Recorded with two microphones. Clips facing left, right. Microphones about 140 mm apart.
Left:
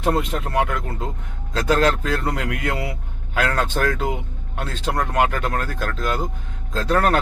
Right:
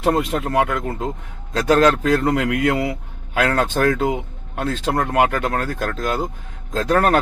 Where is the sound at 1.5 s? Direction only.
40° right (ahead or behind).